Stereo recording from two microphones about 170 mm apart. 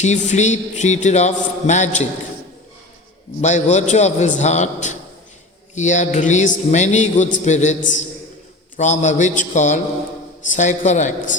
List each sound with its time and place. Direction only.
0.0 s a man's voice: 45° left (ahead or behind)
3.4 s a man's voice: 45° left (ahead or behind)